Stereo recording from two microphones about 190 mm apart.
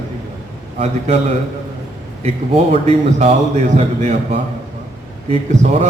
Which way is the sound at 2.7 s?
30° right (ahead or behind).